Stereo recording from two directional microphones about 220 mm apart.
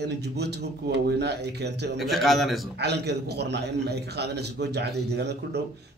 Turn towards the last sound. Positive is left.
turn(degrees=-50)  # may be behind; listen again after turning